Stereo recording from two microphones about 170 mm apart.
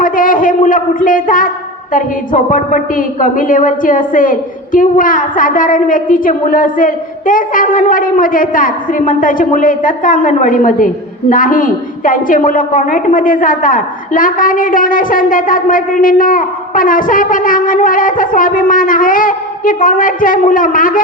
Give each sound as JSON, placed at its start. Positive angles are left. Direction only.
{"t": 0.0, "sound": "a man's voice", "side_deg": 55}